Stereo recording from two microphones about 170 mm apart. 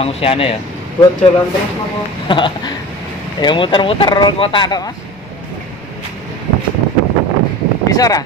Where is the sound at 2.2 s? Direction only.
30° left (ahead or behind).